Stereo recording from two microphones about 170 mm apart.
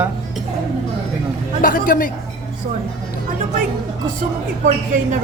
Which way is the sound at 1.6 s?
55° left (ahead or behind).